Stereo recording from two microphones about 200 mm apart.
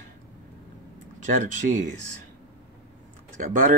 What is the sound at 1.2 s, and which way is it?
Speech, 40° right (ahead or behind).